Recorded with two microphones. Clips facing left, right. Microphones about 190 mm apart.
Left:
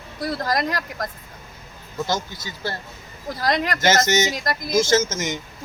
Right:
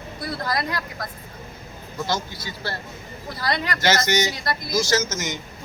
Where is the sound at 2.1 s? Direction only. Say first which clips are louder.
Even; 45° left (ahead or behind).